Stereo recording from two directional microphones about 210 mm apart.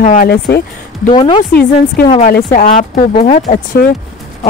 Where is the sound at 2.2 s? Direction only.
40° left (ahead or behind).